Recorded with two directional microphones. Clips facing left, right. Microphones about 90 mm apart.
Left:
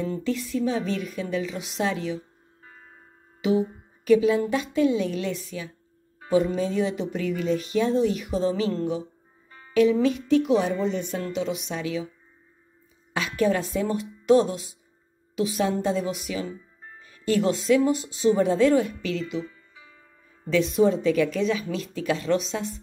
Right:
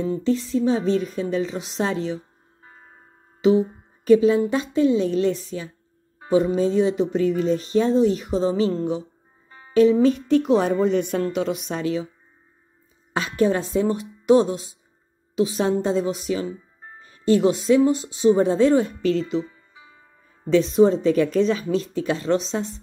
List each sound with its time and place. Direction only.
0.0 s music: 30° right (ahead or behind)
3.3 s a woman's voice: 30° right (ahead or behind)
6.1 s music: 25° right (ahead or behind); by 11.2 s 60° right (ahead or behind)
11.3 s music: 45° right (ahead or behind)
13.1 s a woman's voice: 30° right (ahead or behind)
19.5 s music: 20° right (ahead or behind)
20.5 s music: 30° right (ahead or behind)